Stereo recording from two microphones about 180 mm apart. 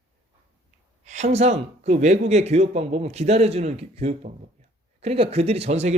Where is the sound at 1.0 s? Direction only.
40° right (ahead or behind).